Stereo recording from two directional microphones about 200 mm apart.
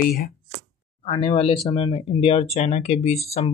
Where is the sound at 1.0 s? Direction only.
30° left (ahead or behind).